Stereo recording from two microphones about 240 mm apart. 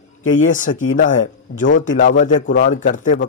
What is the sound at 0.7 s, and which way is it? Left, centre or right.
Speech, left.